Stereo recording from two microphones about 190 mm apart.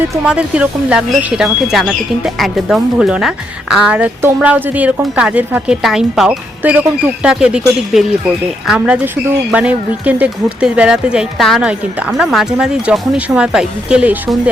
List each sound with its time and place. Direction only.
0.3 s speech: 5° right (ahead or behind)
8.6 s speech: 5° right (ahead or behind)